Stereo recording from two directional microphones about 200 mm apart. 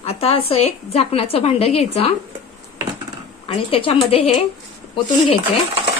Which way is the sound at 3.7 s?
30° left (ahead or behind).